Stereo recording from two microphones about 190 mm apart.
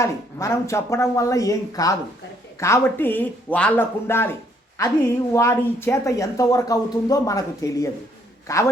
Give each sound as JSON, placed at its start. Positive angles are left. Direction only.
{"t": 0.0, "sound": "speech", "side_deg": 15}